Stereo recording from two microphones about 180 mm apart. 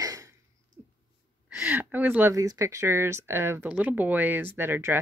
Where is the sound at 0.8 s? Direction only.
10° right (ahead or behind).